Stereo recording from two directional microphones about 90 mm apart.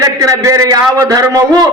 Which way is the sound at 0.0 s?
35° right (ahead or behind).